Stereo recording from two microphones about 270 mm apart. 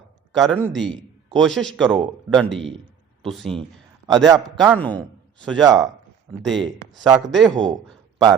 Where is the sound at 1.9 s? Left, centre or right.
Centre.